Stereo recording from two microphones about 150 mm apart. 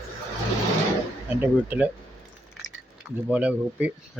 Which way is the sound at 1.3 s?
10° right (ahead or behind).